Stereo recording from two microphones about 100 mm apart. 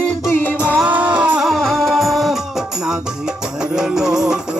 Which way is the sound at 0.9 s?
15° right (ahead or behind).